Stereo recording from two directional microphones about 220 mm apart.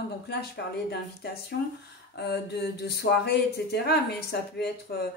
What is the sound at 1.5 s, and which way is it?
Speech, 50° left (ahead or behind).